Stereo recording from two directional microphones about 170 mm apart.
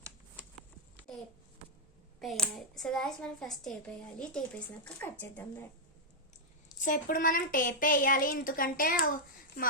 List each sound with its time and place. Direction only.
2.1 s speech: 5° left (ahead or behind)
6.8 s a woman's voice: 50° left (ahead or behind)